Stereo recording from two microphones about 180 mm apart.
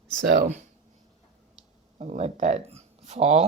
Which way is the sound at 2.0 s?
40° right (ahead or behind).